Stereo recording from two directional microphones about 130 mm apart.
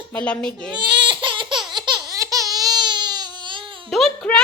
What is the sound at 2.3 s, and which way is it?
Baby cry, 30° right (ahead or behind).